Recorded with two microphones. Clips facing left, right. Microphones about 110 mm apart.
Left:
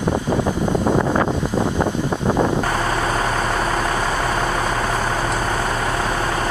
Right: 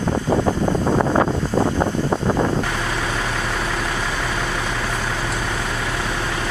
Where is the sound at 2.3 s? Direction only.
15° left (ahead or behind).